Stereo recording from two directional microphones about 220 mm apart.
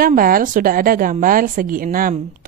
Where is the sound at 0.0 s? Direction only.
40° right (ahead or behind).